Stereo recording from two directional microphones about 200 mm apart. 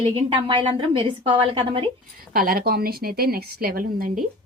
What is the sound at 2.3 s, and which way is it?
A woman's voice, 45° right (ahead or behind).